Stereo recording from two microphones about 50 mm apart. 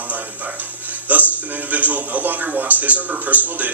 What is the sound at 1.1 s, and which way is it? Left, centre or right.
A man's voice, right.